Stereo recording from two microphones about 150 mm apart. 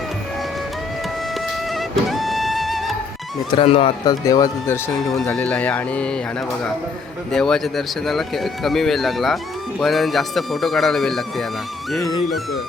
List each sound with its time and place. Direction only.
1.7 s music: centre (ahead or behind)
3.5 s speech: 40° left (ahead or behind)
4.0 s speech: 25° left (ahead or behind); by 6.1 s 10° left (ahead or behind)
7.3 s speech: 5° left (ahead or behind)